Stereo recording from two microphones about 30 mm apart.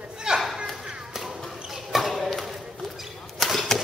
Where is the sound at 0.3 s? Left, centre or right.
Right.